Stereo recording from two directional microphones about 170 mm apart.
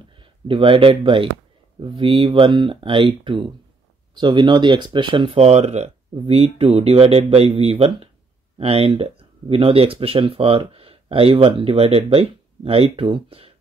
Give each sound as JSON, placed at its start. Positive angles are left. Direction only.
{"t": 0.2, "sound": "speech", "side_deg": -30}